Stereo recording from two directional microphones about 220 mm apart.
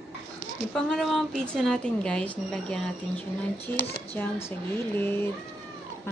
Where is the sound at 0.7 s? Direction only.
Centre (ahead or behind).